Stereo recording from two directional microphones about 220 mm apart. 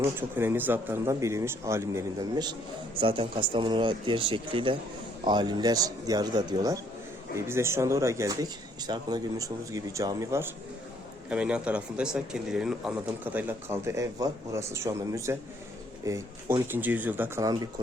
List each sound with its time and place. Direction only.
0.2 s speech: 10° right (ahead or behind)